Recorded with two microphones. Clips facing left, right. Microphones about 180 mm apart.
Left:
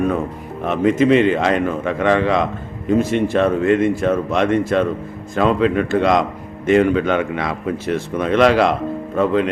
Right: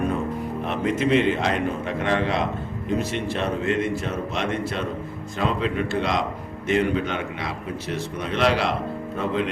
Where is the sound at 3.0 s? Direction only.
50° left (ahead or behind).